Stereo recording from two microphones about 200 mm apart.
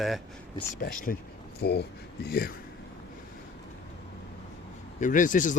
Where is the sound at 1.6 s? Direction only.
55° left (ahead or behind).